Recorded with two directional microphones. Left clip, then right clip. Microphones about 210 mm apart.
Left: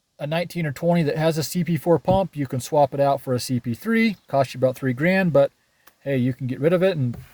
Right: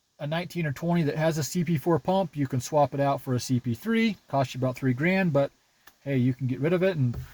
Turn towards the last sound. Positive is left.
turn(degrees=35)  # may be behind; listen again after turning